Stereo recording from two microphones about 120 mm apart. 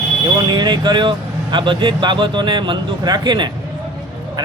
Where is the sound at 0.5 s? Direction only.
35° right (ahead or behind).